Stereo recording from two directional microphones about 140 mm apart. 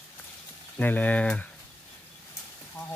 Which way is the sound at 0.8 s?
10° left (ahead or behind).